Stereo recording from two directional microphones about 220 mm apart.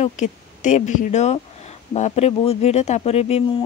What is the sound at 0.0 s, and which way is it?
Speech, 35° left (ahead or behind).